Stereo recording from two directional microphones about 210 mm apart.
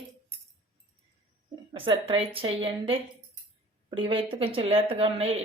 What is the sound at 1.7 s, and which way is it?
Speech, 25° right (ahead or behind).